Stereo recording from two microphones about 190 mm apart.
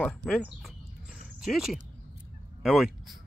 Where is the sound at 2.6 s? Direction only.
Centre (ahead or behind).